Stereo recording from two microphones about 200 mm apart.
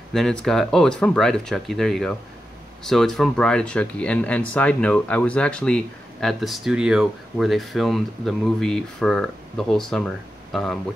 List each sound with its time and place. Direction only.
0.1 s speech: centre (ahead or behind)